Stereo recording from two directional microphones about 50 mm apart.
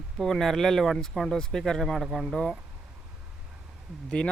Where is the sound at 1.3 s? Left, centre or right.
Centre.